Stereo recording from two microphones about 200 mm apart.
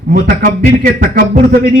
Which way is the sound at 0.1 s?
45° right (ahead or behind).